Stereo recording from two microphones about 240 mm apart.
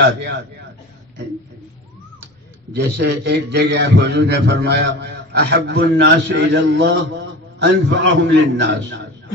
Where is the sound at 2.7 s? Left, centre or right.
Right.